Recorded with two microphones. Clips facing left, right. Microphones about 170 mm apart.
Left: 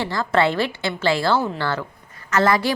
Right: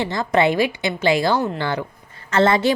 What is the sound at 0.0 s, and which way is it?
A woman's voice, 20° right (ahead or behind).